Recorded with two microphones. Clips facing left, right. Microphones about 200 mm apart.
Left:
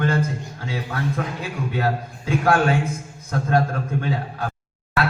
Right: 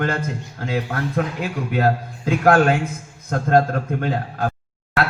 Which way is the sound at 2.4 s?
50° right (ahead or behind).